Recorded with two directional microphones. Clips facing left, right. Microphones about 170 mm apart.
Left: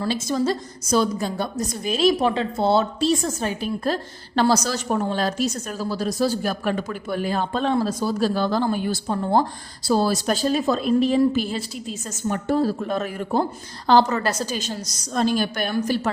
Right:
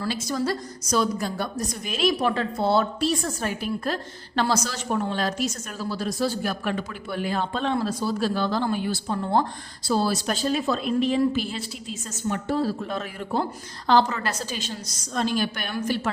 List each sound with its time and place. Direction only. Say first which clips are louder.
0.0 s a woman's voice: left 4 dB; 25° left (ahead or behind); by 15.7 s 40° left (ahead or behind)